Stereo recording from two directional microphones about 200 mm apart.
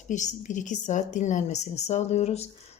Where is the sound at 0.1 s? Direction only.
35° left (ahead or behind).